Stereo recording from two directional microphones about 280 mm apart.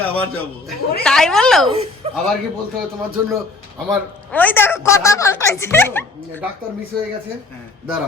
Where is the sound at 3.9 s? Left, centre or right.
Centre.